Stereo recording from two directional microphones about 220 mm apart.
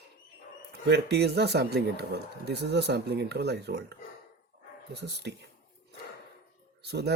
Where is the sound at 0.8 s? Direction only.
50° right (ahead or behind).